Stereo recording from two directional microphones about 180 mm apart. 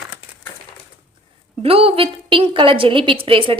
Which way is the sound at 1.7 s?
30° right (ahead or behind).